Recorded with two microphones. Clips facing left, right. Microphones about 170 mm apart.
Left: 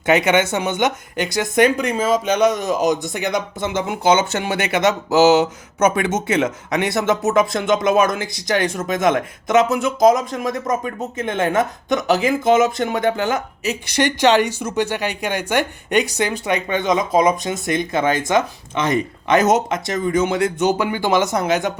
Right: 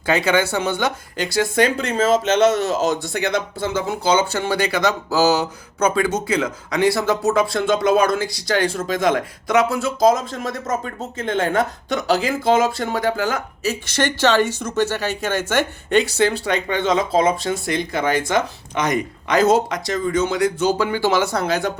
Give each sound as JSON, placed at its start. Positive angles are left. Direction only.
{"t": 0.0, "sound": "speech", "side_deg": 20}